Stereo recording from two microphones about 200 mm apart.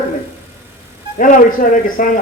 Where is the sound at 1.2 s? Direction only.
40° left (ahead or behind).